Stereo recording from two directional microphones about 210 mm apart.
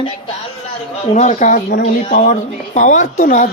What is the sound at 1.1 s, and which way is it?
Speech, 35° left (ahead or behind).